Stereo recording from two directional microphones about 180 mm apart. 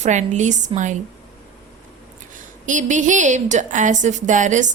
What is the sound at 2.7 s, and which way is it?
A woman's voice, 45° right (ahead or behind).